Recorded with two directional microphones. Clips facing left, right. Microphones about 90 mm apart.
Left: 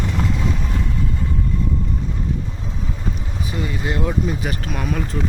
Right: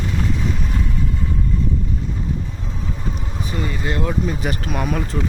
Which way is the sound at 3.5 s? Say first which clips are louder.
Even; 15° left (ahead or behind).